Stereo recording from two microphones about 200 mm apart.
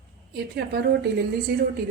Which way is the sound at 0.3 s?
55° right (ahead or behind).